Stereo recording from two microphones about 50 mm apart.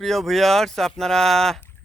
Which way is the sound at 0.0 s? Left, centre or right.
Centre.